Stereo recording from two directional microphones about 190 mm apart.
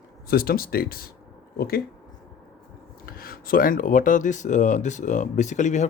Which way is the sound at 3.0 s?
50° left (ahead or behind).